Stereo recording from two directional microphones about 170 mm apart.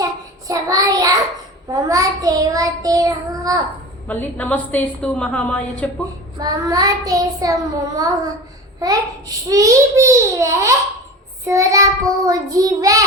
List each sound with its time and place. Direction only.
0.0 s child singing: 20° right (ahead or behind)
1.7 s a child's voice: 20° right (ahead or behind)
4.0 s a woman's voice: 10° left (ahead or behind)
6.4 s a child's voice: 20° right (ahead or behind)